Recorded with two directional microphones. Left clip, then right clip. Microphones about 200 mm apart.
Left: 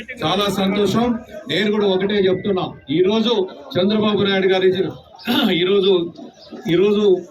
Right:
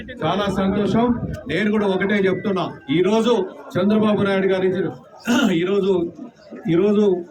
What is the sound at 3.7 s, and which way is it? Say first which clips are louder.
A man's voice: left 1 dB; 5° right (ahead or behind).